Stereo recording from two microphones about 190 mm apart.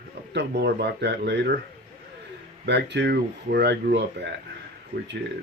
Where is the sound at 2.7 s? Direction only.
65° right (ahead or behind).